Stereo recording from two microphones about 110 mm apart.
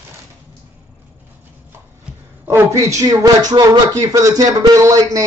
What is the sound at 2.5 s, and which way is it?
Speech, 25° right (ahead or behind).